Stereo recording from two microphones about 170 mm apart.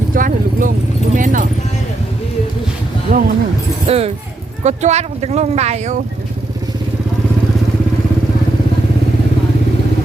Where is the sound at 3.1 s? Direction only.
50° right (ahead or behind).